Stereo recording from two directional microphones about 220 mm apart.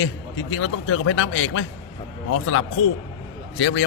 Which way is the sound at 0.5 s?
70° left (ahead or behind).